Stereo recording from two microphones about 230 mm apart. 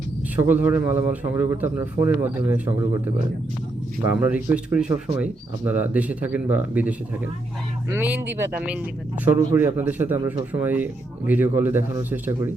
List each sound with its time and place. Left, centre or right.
0.4 s a man's voice: centre
4.2 s a man's voice: centre
9.2 s a man's voice: centre